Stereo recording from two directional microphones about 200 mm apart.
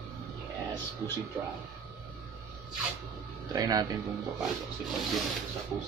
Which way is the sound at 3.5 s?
20° right (ahead or behind).